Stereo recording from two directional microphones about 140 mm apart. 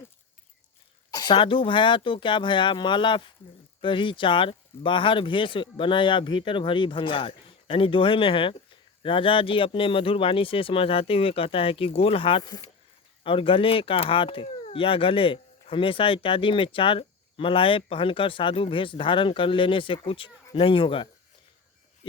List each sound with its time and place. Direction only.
1.1 s speech: 35° left (ahead or behind)
12.4 s speech: 25° left (ahead or behind)
13.2 s speech: 40° left (ahead or behind)